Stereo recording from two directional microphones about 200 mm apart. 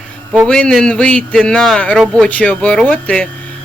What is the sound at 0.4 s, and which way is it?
A man's voice, 5° left (ahead or behind).